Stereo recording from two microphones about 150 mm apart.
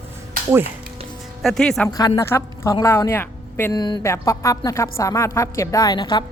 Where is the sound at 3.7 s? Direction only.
30° left (ahead or behind).